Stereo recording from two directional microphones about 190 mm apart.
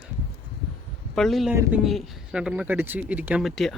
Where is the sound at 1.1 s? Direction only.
Centre (ahead or behind).